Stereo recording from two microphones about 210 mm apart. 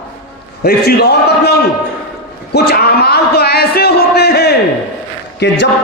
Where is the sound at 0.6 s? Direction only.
50° left (ahead or behind).